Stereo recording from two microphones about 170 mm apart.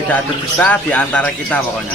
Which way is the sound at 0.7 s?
10° left (ahead or behind).